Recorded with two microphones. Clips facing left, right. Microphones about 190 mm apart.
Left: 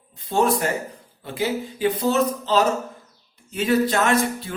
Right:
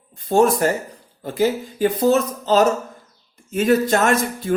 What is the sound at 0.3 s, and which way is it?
A man's voice, 45° right (ahead or behind).